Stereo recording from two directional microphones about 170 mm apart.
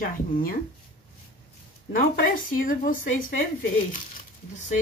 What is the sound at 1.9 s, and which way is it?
Speech, 55° left (ahead or behind).